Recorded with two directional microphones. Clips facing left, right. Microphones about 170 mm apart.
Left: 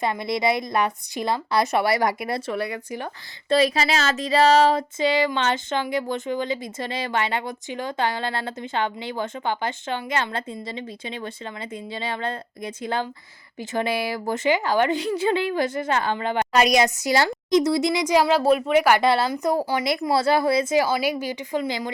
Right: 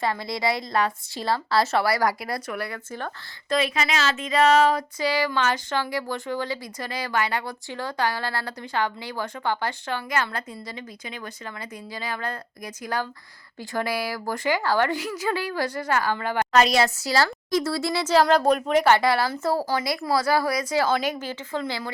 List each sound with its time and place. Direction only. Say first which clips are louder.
0.0 s speech: left 3 dB; 20° left (ahead or behind)
3.5 s a woman's voice: left 4 dB; 35° left (ahead or behind); by 19.0 s 10° left (ahead or behind)
19.0 s speech: left 2 dB; 25° left (ahead or behind)
20.7 s a woman's voice: left 2 dB; 10° left (ahead or behind)